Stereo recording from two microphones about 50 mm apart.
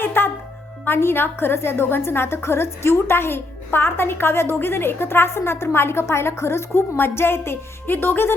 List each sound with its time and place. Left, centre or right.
0.0 s music: left
0.9 s a woman's voice: left